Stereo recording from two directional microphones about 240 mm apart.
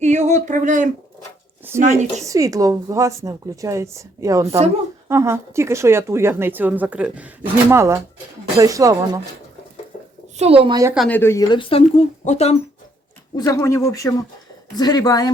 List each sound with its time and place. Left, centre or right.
0.0 s a woman's voice: right
2.2 s speech: centre
4.4 s a woman's voice: right
5.0 s speech: centre
10.3 s a woman's voice: right
10.9 s speech: centre; by 12.5 s left
13.3 s speech: centre